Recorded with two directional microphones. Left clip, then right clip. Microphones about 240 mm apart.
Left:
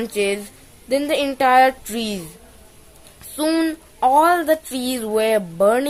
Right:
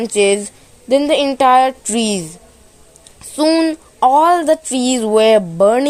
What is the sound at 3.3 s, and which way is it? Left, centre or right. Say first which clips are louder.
Speech: right 6 dB; right.